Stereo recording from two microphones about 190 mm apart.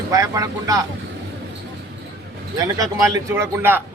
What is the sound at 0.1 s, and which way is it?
Speech, 15° right (ahead or behind).